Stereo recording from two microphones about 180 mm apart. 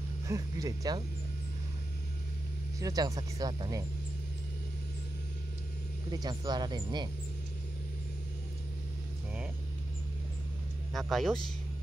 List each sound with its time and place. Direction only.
0.3 s speech: 20° right (ahead or behind)
2.8 s speech: 20° right (ahead or behind)
6.1 s speech: 25° right (ahead or behind)
10.9 s speech: centre (ahead or behind)